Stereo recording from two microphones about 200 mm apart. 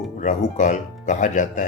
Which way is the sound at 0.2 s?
40° left (ahead or behind).